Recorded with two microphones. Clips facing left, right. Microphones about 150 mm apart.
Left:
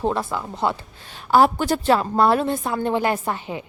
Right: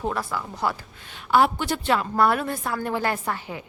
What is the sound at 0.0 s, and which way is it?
A woman's voice, 25° left (ahead or behind).